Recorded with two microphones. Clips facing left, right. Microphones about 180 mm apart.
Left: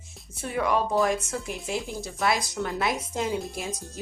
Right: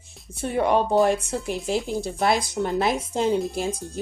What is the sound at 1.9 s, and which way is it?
Speech, 55° right (ahead or behind).